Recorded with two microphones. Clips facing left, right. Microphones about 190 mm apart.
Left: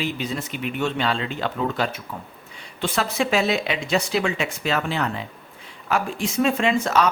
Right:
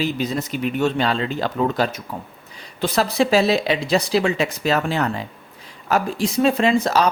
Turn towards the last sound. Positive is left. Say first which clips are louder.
# right 3 dB
turn(degrees=-35)  # may be behind; listen again after turning